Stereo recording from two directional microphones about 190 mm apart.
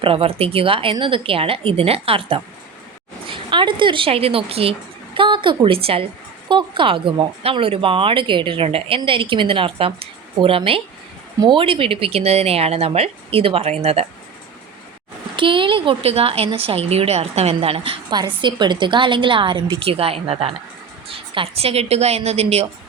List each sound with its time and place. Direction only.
0.0 s a woman's voice: 30° right (ahead or behind)
15.4 s a woman's voice: 25° right (ahead or behind)